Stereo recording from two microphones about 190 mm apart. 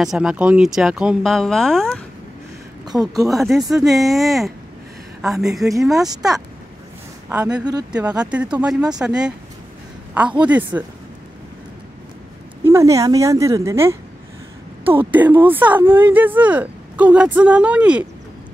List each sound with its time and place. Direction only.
0.0 s speech: 5° right (ahead or behind)
2.8 s speech: 20° right (ahead or behind)
3.3 s speech: centre (ahead or behind)
7.2 s speech: 5° right (ahead or behind)
7.5 s speech: 20° right (ahead or behind)
7.9 s speech: 5° right (ahead or behind)
12.6 s speech: 15° right (ahead or behind)
15.1 s speech: 10° right (ahead or behind)